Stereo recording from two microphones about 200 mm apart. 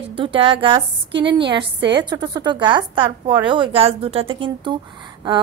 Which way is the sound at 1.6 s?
60° right (ahead or behind).